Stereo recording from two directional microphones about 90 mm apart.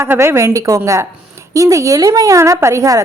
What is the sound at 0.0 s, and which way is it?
A woman's voice, 30° right (ahead or behind).